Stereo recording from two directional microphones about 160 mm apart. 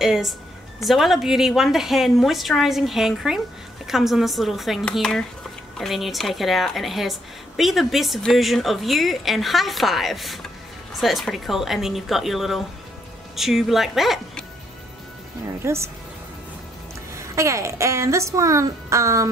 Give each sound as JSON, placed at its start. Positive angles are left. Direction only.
{"t": 0.0, "sound": "a woman's voice", "side_deg": -5}
{"t": 15.6, "sound": "speech", "side_deg": -15}
{"t": 17.1, "sound": "speech", "side_deg": -20}